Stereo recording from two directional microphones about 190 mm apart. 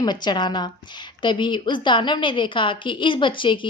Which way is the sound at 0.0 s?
20° left (ahead or behind).